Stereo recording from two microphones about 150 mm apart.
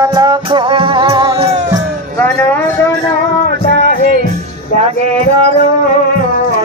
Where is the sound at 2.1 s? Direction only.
10° left (ahead or behind).